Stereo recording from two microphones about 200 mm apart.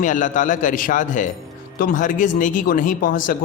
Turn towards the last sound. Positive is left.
turn(degrees=40)  # may be behind; listen again after turning